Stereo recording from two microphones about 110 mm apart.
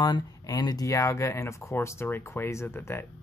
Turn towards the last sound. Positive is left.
turn(degrees=20)  # may be behind; listen again after turning